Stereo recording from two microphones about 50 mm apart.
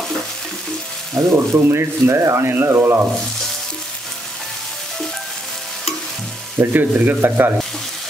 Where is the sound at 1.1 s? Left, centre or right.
Right.